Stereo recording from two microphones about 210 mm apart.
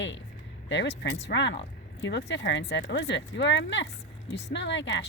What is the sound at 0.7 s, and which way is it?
Speech, 55° left (ahead or behind).